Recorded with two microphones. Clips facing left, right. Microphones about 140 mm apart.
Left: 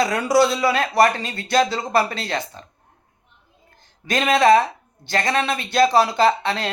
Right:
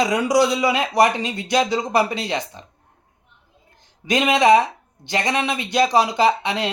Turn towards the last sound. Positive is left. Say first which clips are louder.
# even
turn(degrees=-15)  # may be behind; listen again after turning